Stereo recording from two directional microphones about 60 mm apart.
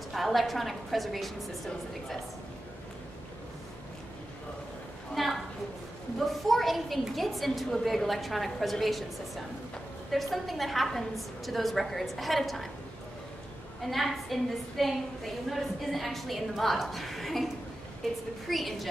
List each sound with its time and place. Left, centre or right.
0.1 s a woman's voice: centre
5.1 s a woman's voice: centre
13.8 s a woman's voice: centre
18.5 s a woman's voice: centre